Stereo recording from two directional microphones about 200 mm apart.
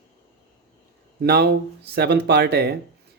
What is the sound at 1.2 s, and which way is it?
Speech, 50° right (ahead or behind).